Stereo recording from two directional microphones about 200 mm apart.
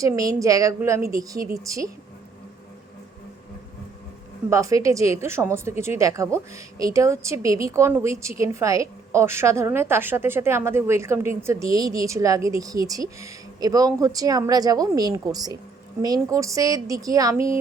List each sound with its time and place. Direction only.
0.0 s a woman's voice: 15° right (ahead or behind)
4.4 s a woman's voice: 15° right (ahead or behind)